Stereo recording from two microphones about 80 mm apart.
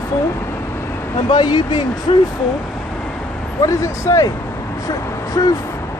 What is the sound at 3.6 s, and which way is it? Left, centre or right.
Speech, left.